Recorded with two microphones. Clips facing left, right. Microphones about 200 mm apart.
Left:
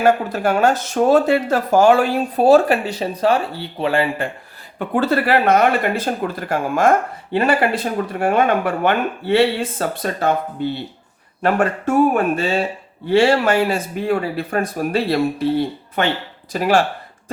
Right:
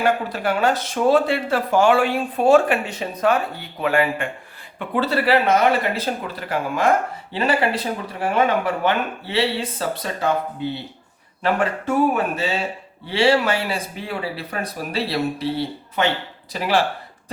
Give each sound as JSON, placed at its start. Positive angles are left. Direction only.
{"t": 0.0, "sound": "speech", "side_deg": 45}
{"t": 4.8, "sound": "speech", "side_deg": 50}
{"t": 11.4, "sound": "speech", "side_deg": 50}